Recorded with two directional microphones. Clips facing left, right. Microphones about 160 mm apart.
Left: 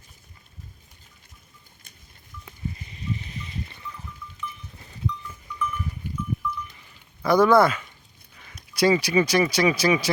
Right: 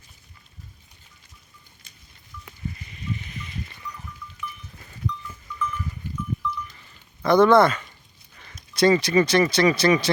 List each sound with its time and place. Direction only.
2.4 s a sound: 30° left (ahead or behind)
5.3 s livestock: 15° left (ahead or behind)
7.2 s speech: 10° left (ahead or behind)